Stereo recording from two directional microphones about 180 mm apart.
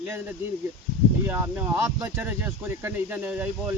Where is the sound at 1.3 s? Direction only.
10° right (ahead or behind).